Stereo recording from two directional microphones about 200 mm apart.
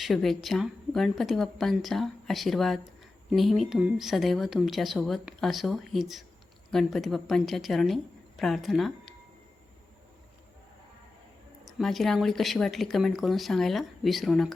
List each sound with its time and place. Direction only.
0.0 s speech: centre (ahead or behind)
11.6 s speech: centre (ahead or behind)